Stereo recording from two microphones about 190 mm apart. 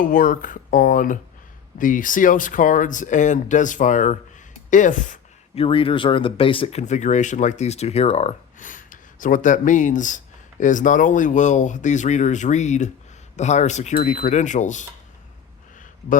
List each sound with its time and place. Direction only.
0.0 s speech: 45° left (ahead or behind)
4.7 s a sound: 40° left (ahead or behind)
5.6 s speech: 30° left (ahead or behind)